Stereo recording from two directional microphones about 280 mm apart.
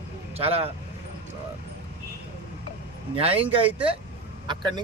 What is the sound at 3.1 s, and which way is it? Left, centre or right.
Speech, centre.